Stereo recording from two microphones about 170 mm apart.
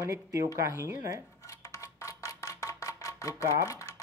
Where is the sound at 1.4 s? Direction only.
15° left (ahead or behind).